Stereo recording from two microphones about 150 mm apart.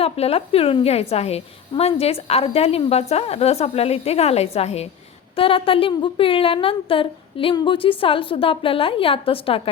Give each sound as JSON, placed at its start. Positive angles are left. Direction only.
{"t": 0.0, "sound": "a woman's voice", "side_deg": 40}